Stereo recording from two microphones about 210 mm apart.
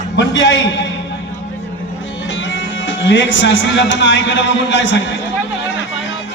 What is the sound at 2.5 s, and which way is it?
Speech, 60° left (ahead or behind).